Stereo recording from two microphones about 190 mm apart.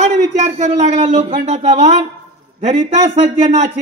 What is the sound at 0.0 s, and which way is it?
A man's voice, 35° right (ahead or behind).